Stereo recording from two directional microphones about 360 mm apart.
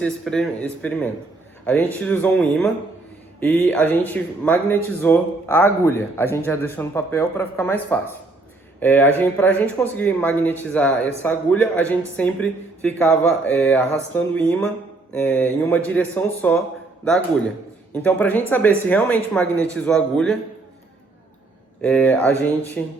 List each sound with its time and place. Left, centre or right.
0.0 s a man's voice: centre
21.8 s a man's voice: centre